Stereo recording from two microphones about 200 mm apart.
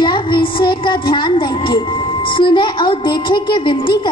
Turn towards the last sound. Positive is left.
turn(degrees=25)  # may be behind; listen again after turning